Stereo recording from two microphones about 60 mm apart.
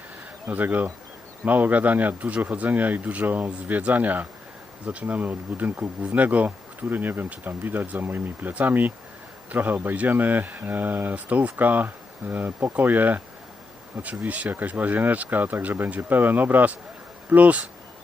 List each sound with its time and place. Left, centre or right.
0.4 s speech: right
4.9 s bee: right
12.7 s speech: right